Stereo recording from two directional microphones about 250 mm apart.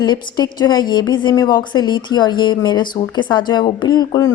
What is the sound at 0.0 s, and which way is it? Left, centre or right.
A woman's voice, centre.